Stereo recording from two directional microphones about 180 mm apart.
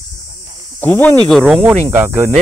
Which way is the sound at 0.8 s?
10° left (ahead or behind).